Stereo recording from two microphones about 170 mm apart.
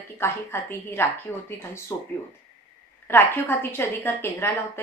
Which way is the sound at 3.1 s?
15° left (ahead or behind).